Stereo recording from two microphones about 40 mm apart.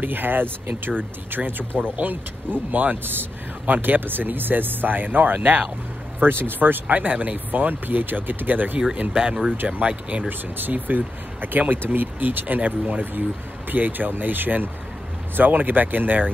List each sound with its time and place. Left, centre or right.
0.0 s speech: right
6.1 s speech: right
6.6 s speech: right
9.7 s speech: right
10.6 s speech: right